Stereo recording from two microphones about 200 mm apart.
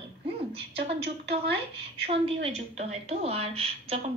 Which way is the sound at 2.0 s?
30° right (ahead or behind).